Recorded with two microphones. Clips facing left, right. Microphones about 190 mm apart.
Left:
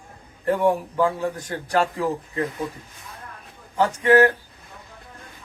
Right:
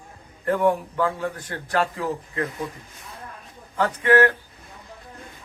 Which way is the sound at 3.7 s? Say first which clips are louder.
Left 2 dB; 10° left (ahead or behind).